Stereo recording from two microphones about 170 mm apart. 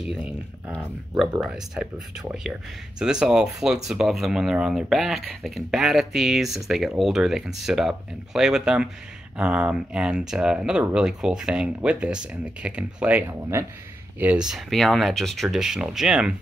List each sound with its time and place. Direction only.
0.0 s speech: 5° right (ahead or behind)
14.2 s speech: 5° right (ahead or behind)